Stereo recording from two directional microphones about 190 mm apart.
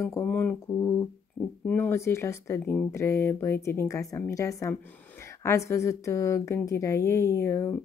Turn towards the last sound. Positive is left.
turn(degrees=15)  # may be behind; listen again after turning